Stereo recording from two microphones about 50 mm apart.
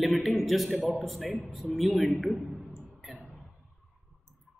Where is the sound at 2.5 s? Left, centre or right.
Centre.